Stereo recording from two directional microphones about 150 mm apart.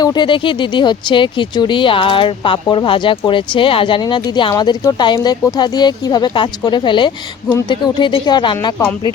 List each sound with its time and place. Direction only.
0.0 s speech: 30° left (ahead or behind)